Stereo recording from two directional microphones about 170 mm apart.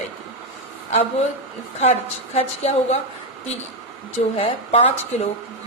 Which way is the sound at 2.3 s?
40° left (ahead or behind).